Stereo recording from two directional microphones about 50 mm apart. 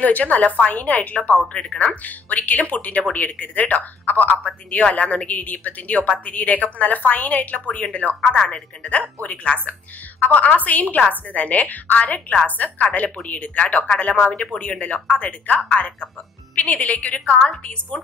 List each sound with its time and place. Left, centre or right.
0.0 s speech: left
1.5 s speech: centre
1.9 s speech: left